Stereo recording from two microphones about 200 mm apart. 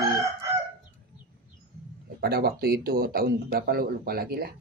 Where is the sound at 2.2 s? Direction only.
50° right (ahead or behind).